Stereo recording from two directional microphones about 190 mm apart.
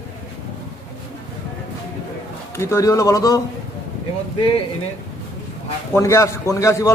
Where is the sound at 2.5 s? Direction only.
15° left (ahead or behind).